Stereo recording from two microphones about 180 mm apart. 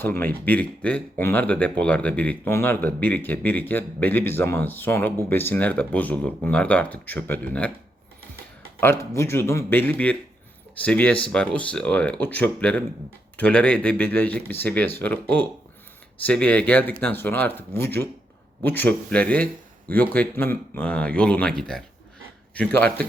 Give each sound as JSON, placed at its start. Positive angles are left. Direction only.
{"t": 0.0, "sound": "speech", "side_deg": 10}
{"t": 8.8, "sound": "speech", "side_deg": 15}